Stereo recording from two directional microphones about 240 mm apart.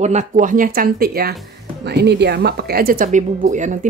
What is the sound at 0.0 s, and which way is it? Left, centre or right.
A woman's voice, right.